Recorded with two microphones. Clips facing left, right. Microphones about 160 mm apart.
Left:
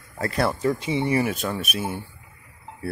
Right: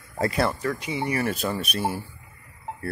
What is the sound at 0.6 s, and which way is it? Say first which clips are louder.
Speech: left 4 dB; 25° left (ahead or behind).